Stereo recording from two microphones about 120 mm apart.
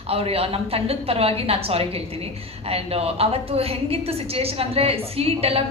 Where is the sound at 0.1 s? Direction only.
55° right (ahead or behind).